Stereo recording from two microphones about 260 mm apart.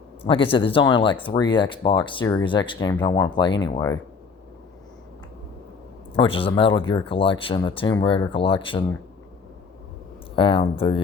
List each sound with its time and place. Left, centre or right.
0.2 s speech: centre
6.1 s speech: left
10.3 s speech: centre